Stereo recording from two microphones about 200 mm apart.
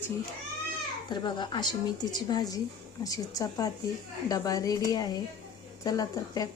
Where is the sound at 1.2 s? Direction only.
20° left (ahead or behind).